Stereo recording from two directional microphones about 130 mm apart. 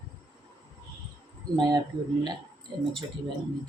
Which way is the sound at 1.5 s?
30° right (ahead or behind).